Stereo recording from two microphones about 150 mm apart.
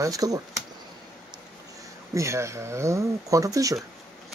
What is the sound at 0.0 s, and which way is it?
Speech, 25° right (ahead or behind).